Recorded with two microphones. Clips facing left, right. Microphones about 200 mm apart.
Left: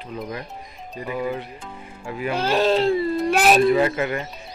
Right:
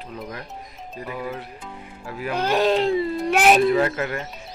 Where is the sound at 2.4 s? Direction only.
15° right (ahead or behind).